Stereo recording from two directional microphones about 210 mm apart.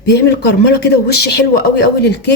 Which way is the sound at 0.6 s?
50° left (ahead or behind).